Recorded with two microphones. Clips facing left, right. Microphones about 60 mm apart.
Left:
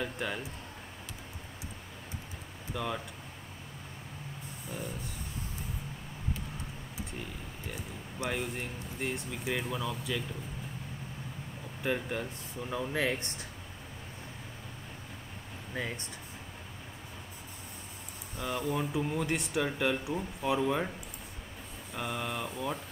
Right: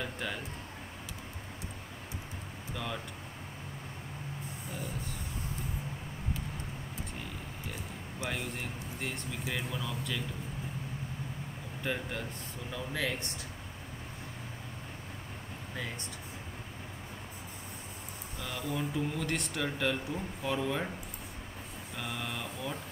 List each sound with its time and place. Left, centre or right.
0.0 s speech: centre
2.7 s speech: centre
8.3 s speech: centre
11.8 s speech: centre
12.7 s speech: left
18.4 s speech: centre
21.9 s speech: centre